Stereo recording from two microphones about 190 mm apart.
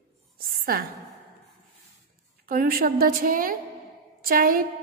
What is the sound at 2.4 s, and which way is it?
A woman's voice, 50° right (ahead or behind).